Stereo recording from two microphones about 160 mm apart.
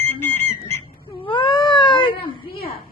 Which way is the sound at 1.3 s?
30° left (ahead or behind).